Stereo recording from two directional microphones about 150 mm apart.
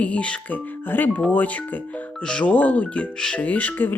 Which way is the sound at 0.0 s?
10° left (ahead or behind).